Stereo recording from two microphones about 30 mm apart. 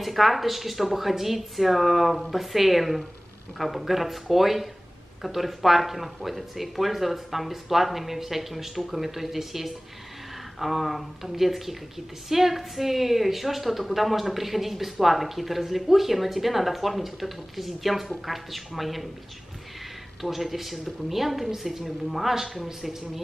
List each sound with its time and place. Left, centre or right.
0.0 s a woman's voice: centre
20.2 s a woman's voice: centre